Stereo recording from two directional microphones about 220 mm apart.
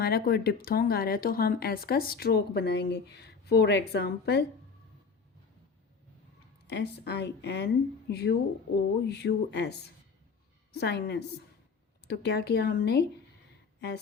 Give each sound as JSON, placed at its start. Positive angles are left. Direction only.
{"t": 0.0, "sound": "speech", "side_deg": 45}
{"t": 6.7, "sound": "speech", "side_deg": 50}